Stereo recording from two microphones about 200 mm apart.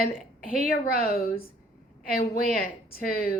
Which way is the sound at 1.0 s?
45° left (ahead or behind).